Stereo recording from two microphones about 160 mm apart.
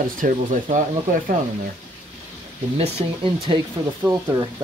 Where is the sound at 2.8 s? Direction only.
30° right (ahead or behind).